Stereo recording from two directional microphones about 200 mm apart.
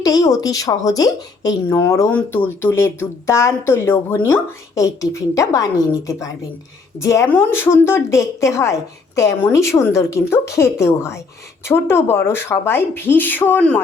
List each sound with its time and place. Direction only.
0.0 s speech: 20° left (ahead or behind)